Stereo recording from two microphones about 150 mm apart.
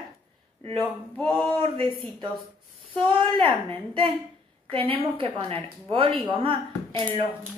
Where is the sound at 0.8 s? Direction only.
10° left (ahead or behind).